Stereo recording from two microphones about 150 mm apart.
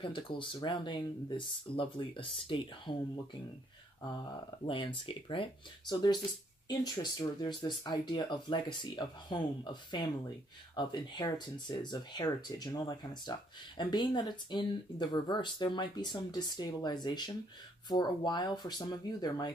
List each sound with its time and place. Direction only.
0.0 s speech: 35° left (ahead or behind)
4.6 s speech: 35° left (ahead or behind)